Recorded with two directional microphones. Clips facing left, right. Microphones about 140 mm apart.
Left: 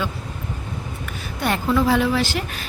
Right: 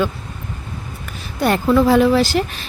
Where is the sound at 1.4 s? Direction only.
40° right (ahead or behind).